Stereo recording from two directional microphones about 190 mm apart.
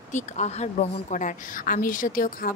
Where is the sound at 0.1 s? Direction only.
35° left (ahead or behind).